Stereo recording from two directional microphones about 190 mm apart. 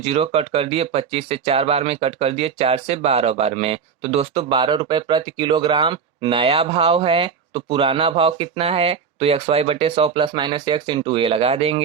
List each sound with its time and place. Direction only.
0.0 s speech: 30° right (ahead or behind)